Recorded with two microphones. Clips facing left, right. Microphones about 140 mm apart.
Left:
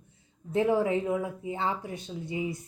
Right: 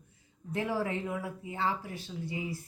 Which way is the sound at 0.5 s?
25° left (ahead or behind).